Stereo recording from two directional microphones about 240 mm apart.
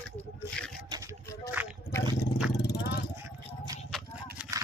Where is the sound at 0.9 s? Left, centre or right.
Centre.